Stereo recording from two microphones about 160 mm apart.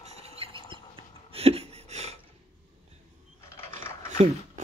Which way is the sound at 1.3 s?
40° right (ahead or behind).